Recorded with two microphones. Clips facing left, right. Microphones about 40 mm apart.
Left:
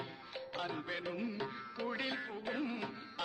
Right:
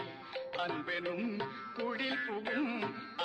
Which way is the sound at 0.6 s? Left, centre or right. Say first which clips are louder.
Right 4 dB; right.